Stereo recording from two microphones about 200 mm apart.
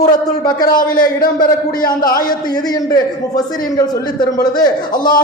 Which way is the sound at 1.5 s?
20° left (ahead or behind).